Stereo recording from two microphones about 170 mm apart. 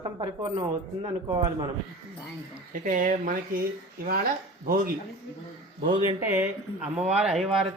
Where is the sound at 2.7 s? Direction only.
50° right (ahead or behind).